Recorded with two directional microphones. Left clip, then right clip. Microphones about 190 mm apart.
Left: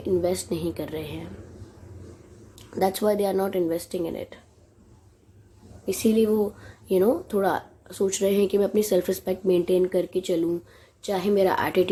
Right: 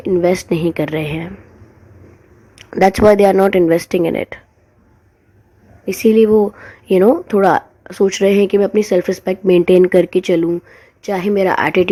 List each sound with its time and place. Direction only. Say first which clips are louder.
0.0 s speech: right 10 dB; 40° right (ahead or behind)
2.6 s speech: right 13 dB; 45° right (ahead or behind)
6.1 s speech: right 13 dB; 40° right (ahead or behind)